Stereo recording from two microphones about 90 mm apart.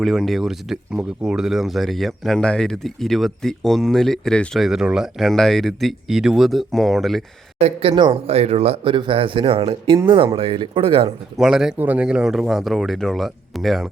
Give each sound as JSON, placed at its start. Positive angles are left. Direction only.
{"t": 0.0, "sound": "speech", "side_deg": 0}
{"t": 7.8, "sound": "speech", "side_deg": -90}
{"t": 9.6, "sound": "speech", "side_deg": -70}
{"t": 10.3, "sound": "speech", "side_deg": -85}
{"t": 11.3, "sound": "speech", "side_deg": -5}